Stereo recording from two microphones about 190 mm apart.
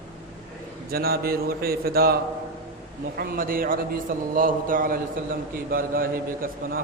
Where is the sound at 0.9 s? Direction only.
55° right (ahead or behind).